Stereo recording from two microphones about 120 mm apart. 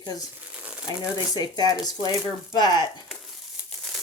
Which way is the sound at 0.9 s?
35° left (ahead or behind).